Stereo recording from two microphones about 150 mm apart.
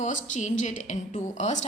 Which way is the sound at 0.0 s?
50° left (ahead or behind).